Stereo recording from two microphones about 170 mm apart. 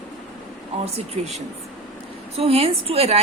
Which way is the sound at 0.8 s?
40° right (ahead or behind).